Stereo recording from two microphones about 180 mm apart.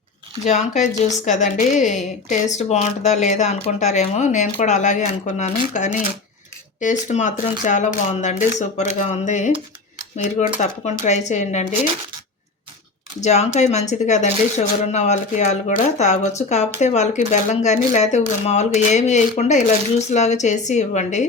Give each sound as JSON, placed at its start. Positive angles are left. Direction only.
{"t": 0.4, "sound": "speech", "side_deg": 40}
{"t": 13.2, "sound": "speech", "side_deg": 40}